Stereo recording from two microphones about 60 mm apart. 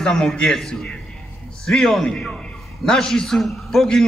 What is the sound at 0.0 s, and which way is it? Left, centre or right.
A man's voice, centre.